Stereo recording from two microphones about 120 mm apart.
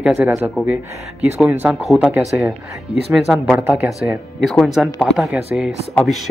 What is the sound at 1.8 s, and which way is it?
Speech, 5° right (ahead or behind).